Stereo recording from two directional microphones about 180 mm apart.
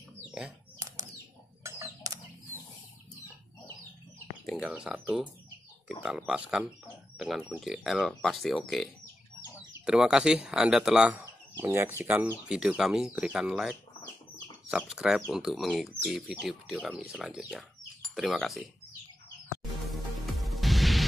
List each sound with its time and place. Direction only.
0.7 s bird flight: 20° right (ahead or behind)
4.5 s speech: 5° right (ahead or behind)
9.8 s speech: 5° right (ahead or behind)
19.9 s music: centre (ahead or behind)